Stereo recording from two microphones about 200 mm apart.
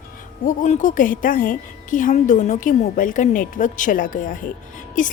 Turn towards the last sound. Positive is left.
turn(degrees=40)  # may be behind; listen again after turning